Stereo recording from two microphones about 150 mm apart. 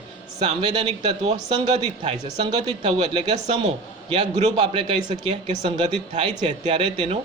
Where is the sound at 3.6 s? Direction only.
40° right (ahead or behind).